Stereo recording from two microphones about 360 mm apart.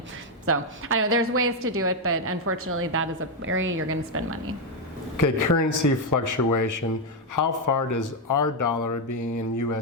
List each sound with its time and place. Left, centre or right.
0.4 s a woman's voice: right
5.1 s speech: left